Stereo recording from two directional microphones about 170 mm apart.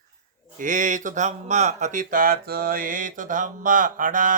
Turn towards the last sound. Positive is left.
turn(degrees=-50)  # may be behind; listen again after turning